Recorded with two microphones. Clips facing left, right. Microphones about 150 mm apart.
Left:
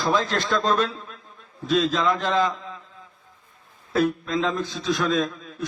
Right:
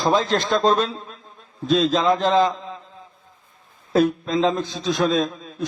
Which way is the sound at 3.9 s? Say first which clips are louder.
Right 4 dB; 25° right (ahead or behind).